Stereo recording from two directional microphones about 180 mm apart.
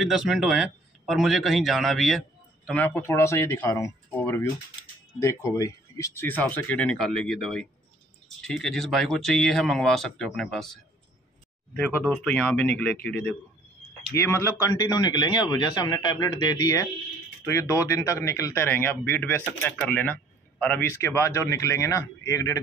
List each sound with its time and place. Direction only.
0.0 s a man's voice: 5° right (ahead or behind); by 22.6 s 20° left (ahead or behind)